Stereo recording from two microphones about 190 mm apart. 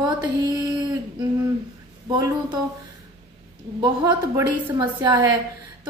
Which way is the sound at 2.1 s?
25° right (ahead or behind).